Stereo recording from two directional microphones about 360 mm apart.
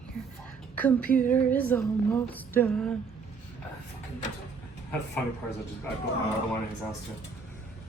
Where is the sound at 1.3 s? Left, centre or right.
Centre.